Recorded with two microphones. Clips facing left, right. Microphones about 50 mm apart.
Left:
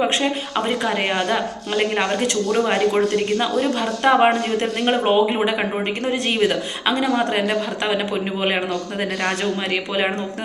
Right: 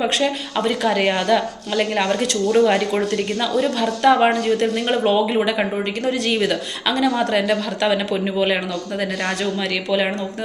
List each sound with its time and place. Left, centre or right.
0.0 s speech: left
1.3 s speech: left
3.8 s speech: left